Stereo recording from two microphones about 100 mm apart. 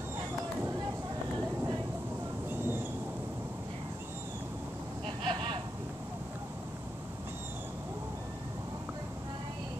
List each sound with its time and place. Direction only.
2.5 s train: 20° right (ahead or behind)
5.0 s vehicle: 60° right (ahead or behind)